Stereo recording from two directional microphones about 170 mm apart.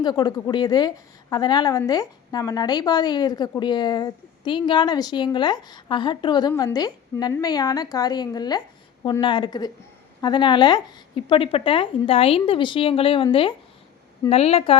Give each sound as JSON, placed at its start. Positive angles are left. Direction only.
{"t": 0.0, "sound": "a woman's voice", "side_deg": 25}